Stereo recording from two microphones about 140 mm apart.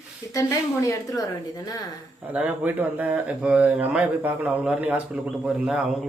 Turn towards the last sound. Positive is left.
turn(degrees=-5)  # may be behind; listen again after turning